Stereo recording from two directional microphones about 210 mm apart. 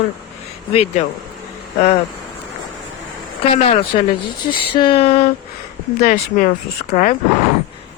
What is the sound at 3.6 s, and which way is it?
Speech, 25° left (ahead or behind).